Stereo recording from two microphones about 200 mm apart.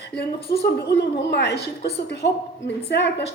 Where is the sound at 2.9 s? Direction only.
60° left (ahead or behind).